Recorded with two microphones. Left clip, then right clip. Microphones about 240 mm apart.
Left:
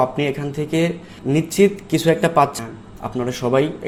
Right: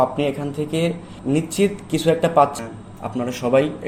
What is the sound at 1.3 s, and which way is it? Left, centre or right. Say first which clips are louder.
Speech: left 1 dB; left.